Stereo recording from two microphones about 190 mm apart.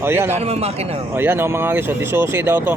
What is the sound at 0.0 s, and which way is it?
Speech, 10° right (ahead or behind).